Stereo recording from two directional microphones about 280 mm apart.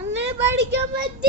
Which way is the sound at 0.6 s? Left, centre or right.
Right.